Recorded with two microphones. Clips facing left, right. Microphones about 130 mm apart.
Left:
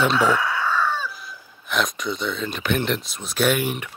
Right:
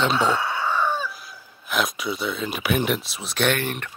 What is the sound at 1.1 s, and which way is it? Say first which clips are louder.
Speech: left 2 dB; centre (ahead or behind).